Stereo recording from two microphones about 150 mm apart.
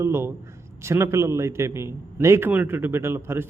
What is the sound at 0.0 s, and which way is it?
A man's voice, 15° right (ahead or behind).